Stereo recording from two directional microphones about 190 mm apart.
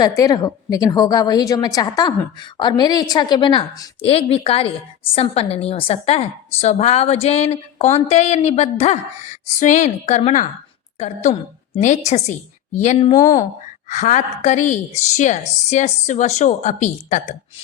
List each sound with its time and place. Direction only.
0.0 s a woman's voice: 20° left (ahead or behind); by 13.1 s 35° left (ahead or behind)
13.1 s a woman's voice: 20° left (ahead or behind)
13.9 s a woman's voice: 40° left (ahead or behind)